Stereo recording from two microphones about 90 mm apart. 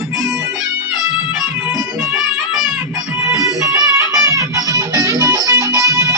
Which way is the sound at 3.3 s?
40° right (ahead or behind).